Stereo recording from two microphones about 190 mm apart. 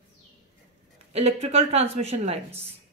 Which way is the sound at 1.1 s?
35° right (ahead or behind).